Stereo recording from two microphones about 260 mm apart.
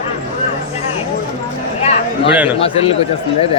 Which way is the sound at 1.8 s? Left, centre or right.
Left.